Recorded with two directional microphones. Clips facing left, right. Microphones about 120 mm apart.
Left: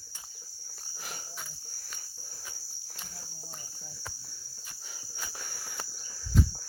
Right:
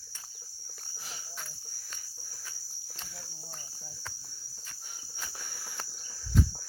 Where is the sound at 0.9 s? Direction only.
60° left (ahead or behind).